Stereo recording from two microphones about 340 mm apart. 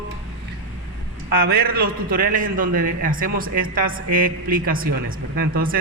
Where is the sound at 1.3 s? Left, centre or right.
Right.